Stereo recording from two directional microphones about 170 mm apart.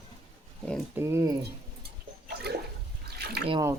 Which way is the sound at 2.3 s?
70° right (ahead or behind).